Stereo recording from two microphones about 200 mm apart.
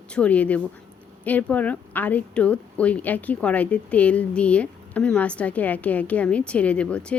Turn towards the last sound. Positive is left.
turn(degrees=5)  # may be behind; listen again after turning